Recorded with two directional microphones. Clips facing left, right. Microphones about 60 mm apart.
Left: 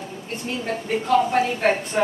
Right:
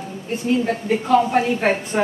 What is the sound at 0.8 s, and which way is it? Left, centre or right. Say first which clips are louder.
Speech: right 1 dB; centre.